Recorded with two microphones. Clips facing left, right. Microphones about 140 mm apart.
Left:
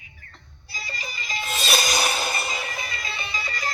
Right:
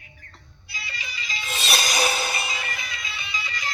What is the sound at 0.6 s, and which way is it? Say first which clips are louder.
Music: left 2 dB; 40° left (ahead or behind).